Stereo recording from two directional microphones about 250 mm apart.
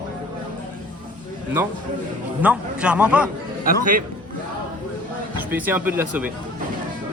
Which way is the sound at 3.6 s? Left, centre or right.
Right.